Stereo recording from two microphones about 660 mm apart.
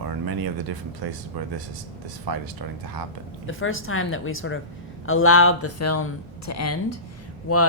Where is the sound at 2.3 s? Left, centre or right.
Right.